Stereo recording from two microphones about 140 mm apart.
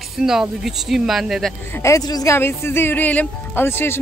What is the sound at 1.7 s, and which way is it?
Speech, 20° left (ahead or behind).